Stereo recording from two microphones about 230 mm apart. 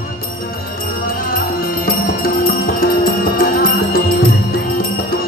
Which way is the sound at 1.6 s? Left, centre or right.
Left.